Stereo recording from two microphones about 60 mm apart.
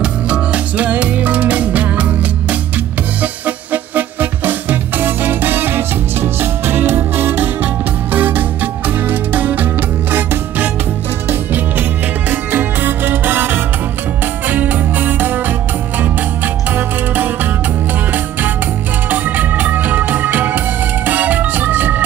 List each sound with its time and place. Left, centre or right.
0.0 s music: right
3.2 s music: right
12.3 s music: right
16.7 s music: right
19.0 s music: right